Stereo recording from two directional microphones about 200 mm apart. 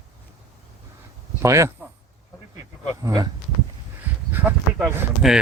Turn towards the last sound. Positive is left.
turn(degrees=0)  # may be behind; listen again after turning